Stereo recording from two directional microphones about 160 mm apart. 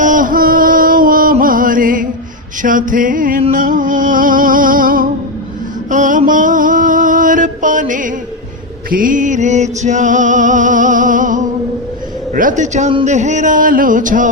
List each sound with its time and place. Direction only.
0.0 s music: 55° right (ahead or behind)
2.6 s a sound: 55° right (ahead or behind)
3.5 s music: 55° right (ahead or behind)
5.9 s mantra: 50° right (ahead or behind)
8.9 s music: 60° right (ahead or behind)